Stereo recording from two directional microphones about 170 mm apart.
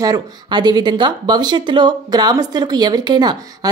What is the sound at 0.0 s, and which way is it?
Speech, 25° right (ahead or behind).